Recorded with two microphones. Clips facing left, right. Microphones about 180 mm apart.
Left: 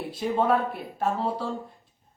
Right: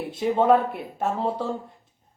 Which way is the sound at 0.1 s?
25° right (ahead or behind).